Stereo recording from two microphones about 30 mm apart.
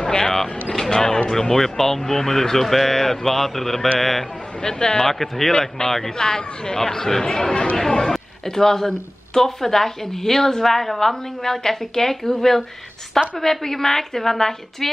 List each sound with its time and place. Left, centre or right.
0.0 s a man's voice: left; by 4.3 s centre
4.6 s speech: left
5.0 s speech: centre
5.5 s speech: centre
6.1 s speech: left